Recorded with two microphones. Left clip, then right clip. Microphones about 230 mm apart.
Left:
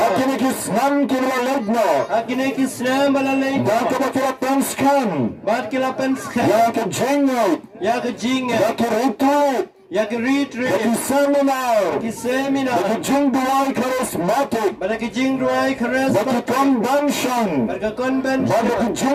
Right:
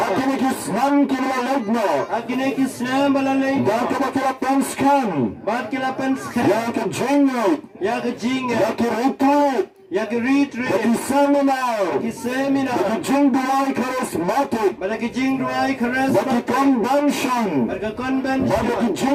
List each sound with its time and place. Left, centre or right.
0.1 s speech: left